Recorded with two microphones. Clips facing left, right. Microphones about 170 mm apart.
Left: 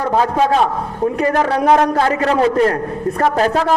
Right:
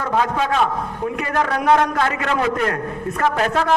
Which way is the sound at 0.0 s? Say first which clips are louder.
Left 5 dB; 35° left (ahead or behind).